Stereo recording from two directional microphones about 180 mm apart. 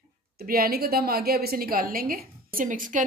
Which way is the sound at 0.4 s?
55° right (ahead or behind).